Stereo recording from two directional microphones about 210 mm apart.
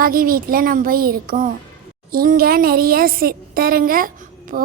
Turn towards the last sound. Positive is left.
turn(degrees=-45)  # may be behind; listen again after turning